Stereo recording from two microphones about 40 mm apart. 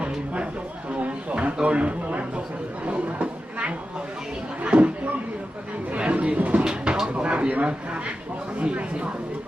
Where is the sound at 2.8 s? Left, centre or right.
Right.